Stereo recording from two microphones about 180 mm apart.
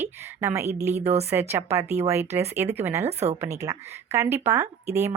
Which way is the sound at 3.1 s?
35° right (ahead or behind).